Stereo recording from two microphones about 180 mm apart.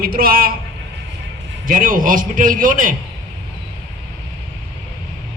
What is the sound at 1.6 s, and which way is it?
A man's voice, 50° right (ahead or behind).